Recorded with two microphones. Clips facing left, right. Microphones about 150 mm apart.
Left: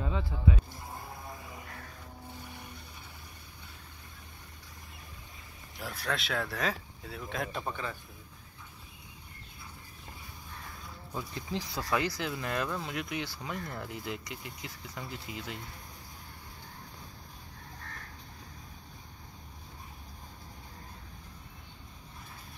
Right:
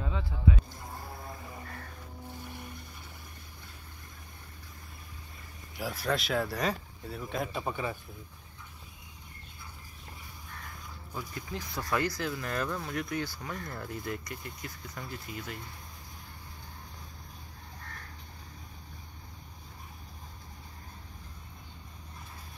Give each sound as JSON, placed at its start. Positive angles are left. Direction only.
{"t": 5.8, "sound": "speech", "side_deg": 0}
{"t": 7.6, "sound": "a man's voice", "side_deg": -15}
{"t": 11.1, "sound": "speech", "side_deg": 30}
{"t": 11.7, "sound": "speech", "side_deg": 10}